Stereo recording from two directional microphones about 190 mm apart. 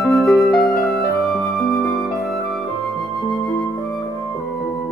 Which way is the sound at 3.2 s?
Centre (ahead or behind).